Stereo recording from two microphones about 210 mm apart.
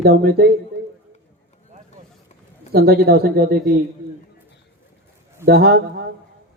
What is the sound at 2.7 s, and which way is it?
A man's voice, 50° right (ahead or behind).